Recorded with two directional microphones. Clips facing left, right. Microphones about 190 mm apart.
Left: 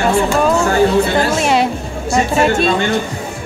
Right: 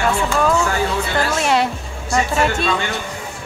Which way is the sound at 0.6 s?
35° left (ahead or behind).